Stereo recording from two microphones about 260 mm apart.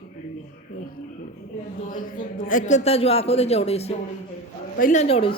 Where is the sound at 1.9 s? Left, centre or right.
Left.